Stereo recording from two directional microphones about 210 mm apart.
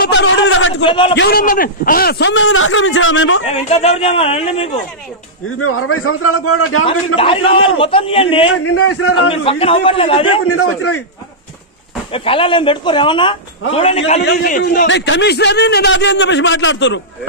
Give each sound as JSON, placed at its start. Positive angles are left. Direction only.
{"t": 0.0, "sound": "a man's voice", "side_deg": 55}
{"t": 0.8, "sound": "a man's voice", "side_deg": 25}
{"t": 1.1, "sound": "a man's voice", "side_deg": 55}
{"t": 1.4, "sound": "a man's voice", "side_deg": 40}
{"t": 3.4, "sound": "a man's voice", "side_deg": 30}
{"t": 5.6, "sound": "a man's voice", "side_deg": 90}
{"t": 7.2, "sound": "a man's voice", "side_deg": 25}
{"t": 8.5, "sound": "a man's voice", "side_deg": 90}
{"t": 9.3, "sound": "a man's voice", "side_deg": 25}
{"t": 10.4, "sound": "a man's voice", "side_deg": 90}
{"t": 12.1, "sound": "a man's voice", "side_deg": 25}
{"t": 14.2, "sound": "a man's voice", "side_deg": 45}